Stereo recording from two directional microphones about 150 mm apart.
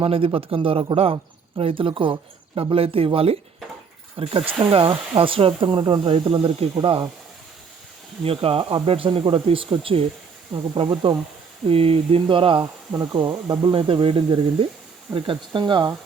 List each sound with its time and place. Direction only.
0.0 s speech: 40° right (ahead or behind)
8.2 s speech: 40° right (ahead or behind)